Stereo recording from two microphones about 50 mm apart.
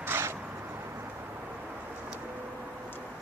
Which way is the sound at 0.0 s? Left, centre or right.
Right.